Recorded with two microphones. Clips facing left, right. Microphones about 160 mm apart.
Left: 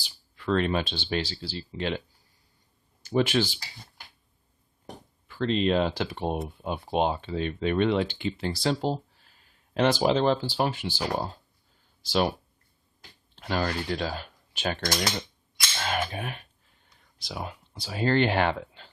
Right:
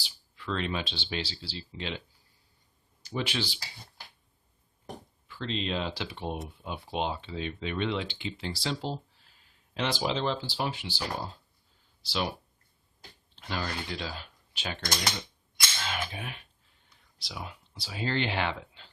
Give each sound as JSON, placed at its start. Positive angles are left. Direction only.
{"t": 0.0, "sound": "speech", "side_deg": 50}
{"t": 3.0, "sound": "speech", "side_deg": 45}
{"t": 5.3, "sound": "speech", "side_deg": 50}
{"t": 12.0, "sound": "speech", "side_deg": 50}
{"t": 13.3, "sound": "speech", "side_deg": 50}
{"t": 15.8, "sound": "cap gun", "side_deg": 50}
{"t": 17.2, "sound": "speech", "side_deg": 45}